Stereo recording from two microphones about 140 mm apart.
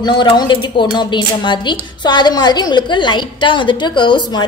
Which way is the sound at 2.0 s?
30° left (ahead or behind).